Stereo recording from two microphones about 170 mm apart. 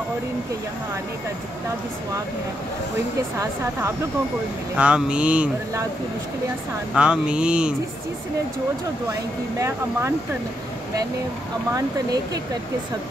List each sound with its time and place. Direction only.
4.7 s mantra: 5° right (ahead or behind)
7.0 s a sound: 5° right (ahead or behind)
9.6 s mantra: 15° right (ahead or behind)